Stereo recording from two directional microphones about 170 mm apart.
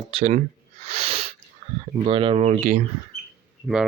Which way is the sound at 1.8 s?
30° right (ahead or behind).